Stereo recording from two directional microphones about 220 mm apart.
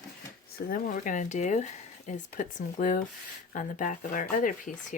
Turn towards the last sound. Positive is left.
turn(degrees=40)  # may be behind; listen again after turning